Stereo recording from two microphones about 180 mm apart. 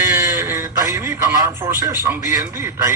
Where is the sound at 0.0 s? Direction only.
15° right (ahead or behind).